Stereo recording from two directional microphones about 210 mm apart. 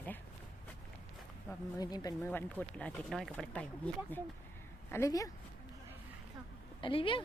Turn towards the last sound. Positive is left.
turn(degrees=25)  # may be behind; listen again after turning